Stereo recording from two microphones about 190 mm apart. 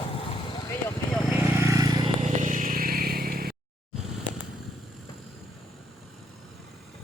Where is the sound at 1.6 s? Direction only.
20° right (ahead or behind).